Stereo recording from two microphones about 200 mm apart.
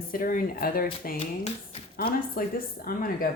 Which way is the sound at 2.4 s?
50° left (ahead or behind).